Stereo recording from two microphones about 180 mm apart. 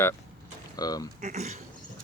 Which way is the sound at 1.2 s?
40° right (ahead or behind).